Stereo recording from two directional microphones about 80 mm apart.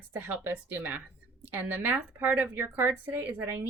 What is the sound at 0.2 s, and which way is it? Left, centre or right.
Speech, right.